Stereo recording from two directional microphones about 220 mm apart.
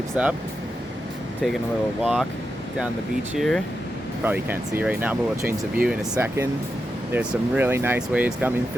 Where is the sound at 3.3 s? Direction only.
Centre (ahead or behind).